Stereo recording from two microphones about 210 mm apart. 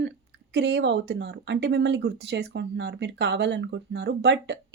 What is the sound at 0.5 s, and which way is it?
Speech, 55° right (ahead or behind).